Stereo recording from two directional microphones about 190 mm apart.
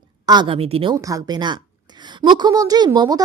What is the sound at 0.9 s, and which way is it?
Speech, 20° right (ahead or behind).